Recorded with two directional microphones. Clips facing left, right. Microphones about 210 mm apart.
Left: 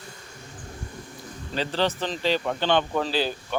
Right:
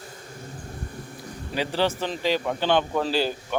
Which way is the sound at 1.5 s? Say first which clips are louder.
Right 1 dB; 10° right (ahead or behind).